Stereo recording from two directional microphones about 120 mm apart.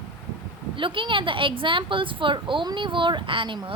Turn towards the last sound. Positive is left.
turn(degrees=-45)  # may be behind; listen again after turning